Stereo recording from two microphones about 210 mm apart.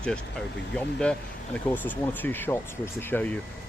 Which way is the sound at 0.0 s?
5° left (ahead or behind).